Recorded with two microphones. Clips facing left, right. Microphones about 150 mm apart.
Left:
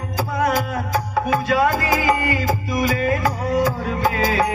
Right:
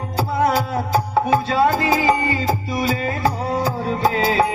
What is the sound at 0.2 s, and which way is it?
Music, 30° right (ahead or behind).